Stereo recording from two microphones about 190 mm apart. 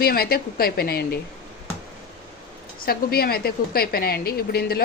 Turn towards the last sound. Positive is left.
turn(degrees=55)  # may be behind; listen again after turning